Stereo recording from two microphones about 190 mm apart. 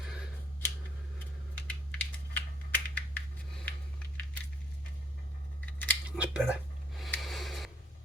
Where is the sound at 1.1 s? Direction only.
10° left (ahead or behind).